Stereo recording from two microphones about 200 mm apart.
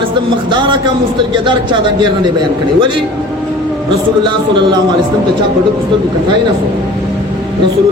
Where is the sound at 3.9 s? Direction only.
25° right (ahead or behind).